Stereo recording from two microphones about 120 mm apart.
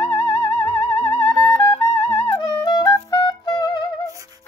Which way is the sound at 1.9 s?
65° left (ahead or behind).